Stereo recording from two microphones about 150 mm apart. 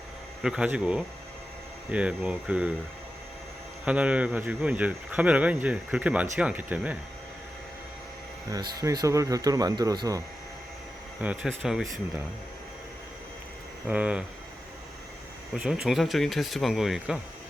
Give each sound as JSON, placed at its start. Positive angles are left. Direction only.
{"t": 0.4, "sound": "speech", "side_deg": -5}
{"t": 3.8, "sound": "speech", "side_deg": -10}
{"t": 8.4, "sound": "speech", "side_deg": -25}
{"t": 11.2, "sound": "speech", "side_deg": -5}
{"t": 13.8, "sound": "speech", "side_deg": -10}
{"t": 15.5, "sound": "speech", "side_deg": -5}